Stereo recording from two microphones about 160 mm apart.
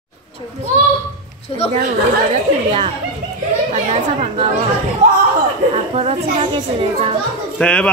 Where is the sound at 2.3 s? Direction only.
35° right (ahead or behind).